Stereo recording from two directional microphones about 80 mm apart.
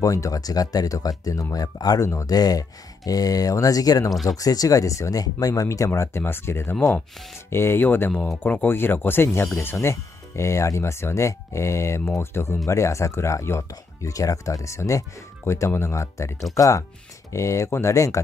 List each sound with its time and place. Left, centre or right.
0.0 s speech: left
2.0 s speech: left
2.3 s speech: left
5.9 s speech: left